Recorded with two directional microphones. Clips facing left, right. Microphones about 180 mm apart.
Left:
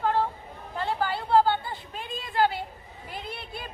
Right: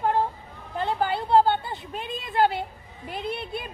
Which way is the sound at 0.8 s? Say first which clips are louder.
Right 3 dB; 20° right (ahead or behind).